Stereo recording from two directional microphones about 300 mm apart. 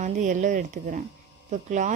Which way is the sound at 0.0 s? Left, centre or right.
Right.